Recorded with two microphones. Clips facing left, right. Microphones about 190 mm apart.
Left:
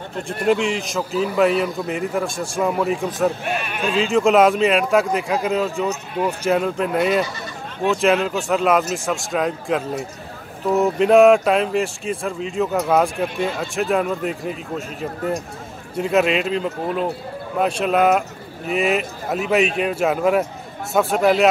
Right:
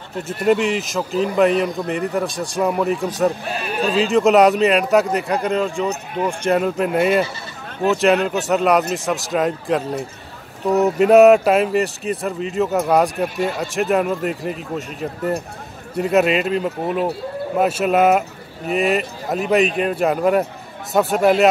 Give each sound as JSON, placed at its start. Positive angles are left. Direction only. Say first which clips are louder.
{"t": 0.3, "sound": "speech", "louder": "right 2 dB", "side_deg": 0}
{"t": 3.4, "sound": "speech", "louder": "right 2 dB", "side_deg": -35}
{"t": 4.0, "sound": "speech", "louder": "right 1 dB", "side_deg": 0}